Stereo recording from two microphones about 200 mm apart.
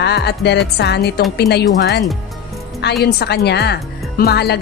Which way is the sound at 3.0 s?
55° left (ahead or behind).